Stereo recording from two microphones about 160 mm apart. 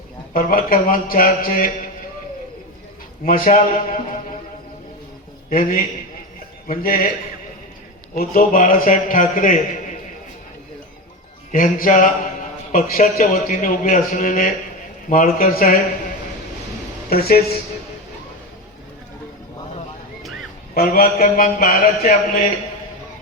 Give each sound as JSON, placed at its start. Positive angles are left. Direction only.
{"t": 0.3, "sound": "a man's voice", "side_deg": 60}
{"t": 3.2, "sound": "a man's voice", "side_deg": 60}
{"t": 5.5, "sound": "a man's voice", "side_deg": 65}
{"t": 8.1, "sound": "a man's voice", "side_deg": 60}
{"t": 11.5, "sound": "a man's voice", "side_deg": 55}
{"t": 17.1, "sound": "a woman's voice", "side_deg": 75}
{"t": 20.7, "sound": "a man's voice", "side_deg": 65}